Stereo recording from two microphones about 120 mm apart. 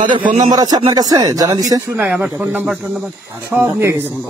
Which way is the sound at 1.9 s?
15° right (ahead or behind).